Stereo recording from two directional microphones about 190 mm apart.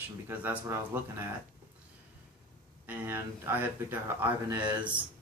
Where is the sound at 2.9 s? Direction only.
10° right (ahead or behind).